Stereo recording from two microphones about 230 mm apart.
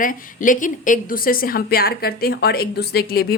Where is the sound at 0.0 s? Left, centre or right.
Left.